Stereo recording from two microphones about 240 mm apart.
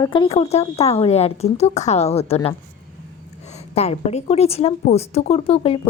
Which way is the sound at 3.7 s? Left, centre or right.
Left.